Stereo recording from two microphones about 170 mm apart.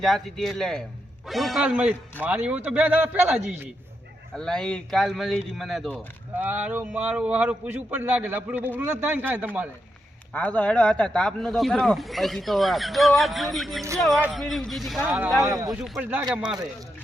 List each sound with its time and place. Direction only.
0.0 s a man's voice: centre (ahead or behind)
4.4 s a man's voice: 5° left (ahead or behind)
10.3 s a man's voice: 5° left (ahead or behind); by 15.3 s 10° right (ahead or behind)
15.4 s speech: 20° right (ahead or behind)
15.7 s a man's voice: 10° right (ahead or behind)